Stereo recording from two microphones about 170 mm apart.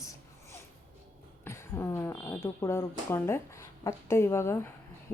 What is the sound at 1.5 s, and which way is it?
A woman's voice, 15° left (ahead or behind).